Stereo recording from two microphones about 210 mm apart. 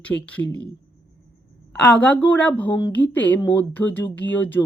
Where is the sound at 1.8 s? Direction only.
5° left (ahead or behind).